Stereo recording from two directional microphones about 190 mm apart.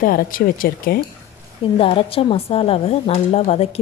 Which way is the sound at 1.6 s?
30° left (ahead or behind).